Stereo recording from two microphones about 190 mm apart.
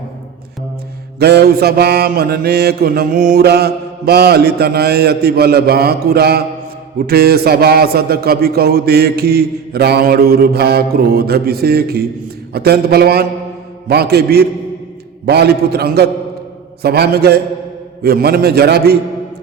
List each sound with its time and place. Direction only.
1.2 s mantra: 60° right (ahead or behind)